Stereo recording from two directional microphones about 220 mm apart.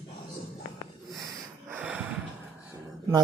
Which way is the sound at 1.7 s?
5° right (ahead or behind).